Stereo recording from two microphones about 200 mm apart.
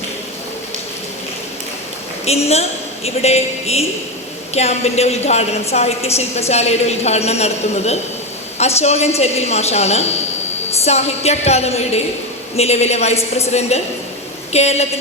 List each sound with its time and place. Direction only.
2.2 s a woman's voice: 30° left (ahead or behind)